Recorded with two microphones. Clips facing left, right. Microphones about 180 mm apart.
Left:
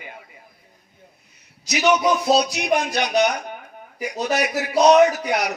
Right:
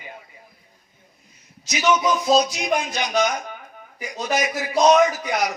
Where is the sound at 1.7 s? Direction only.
65° left (ahead or behind).